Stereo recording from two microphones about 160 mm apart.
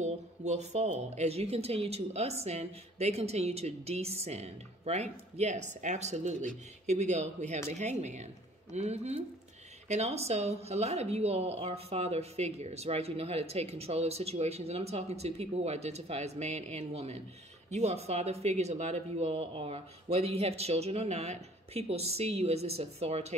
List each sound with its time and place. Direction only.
0.0 s speech: 45° right (ahead or behind)